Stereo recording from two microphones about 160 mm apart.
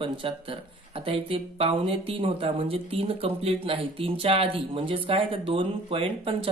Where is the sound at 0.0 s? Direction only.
35° right (ahead or behind).